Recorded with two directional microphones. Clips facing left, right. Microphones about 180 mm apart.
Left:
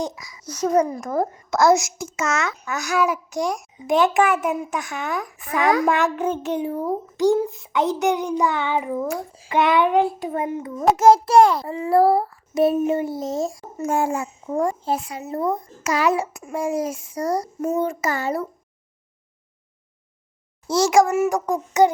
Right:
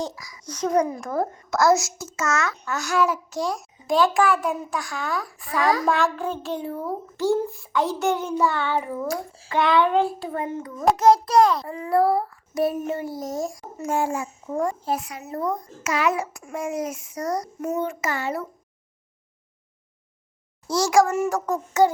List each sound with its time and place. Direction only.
0.0 s a child's voice: 25° left (ahead or behind)
0.4 s a child's voice: 10° left (ahead or behind)
1.1 s a child's voice: 15° left (ahead or behind)
13.7 s a child's voice: 50° left (ahead or behind)
14.5 s a child's voice: 30° left (ahead or behind)
15.8 s a child's voice: 35° left (ahead or behind)
20.7 s a child's voice: 25° left (ahead or behind)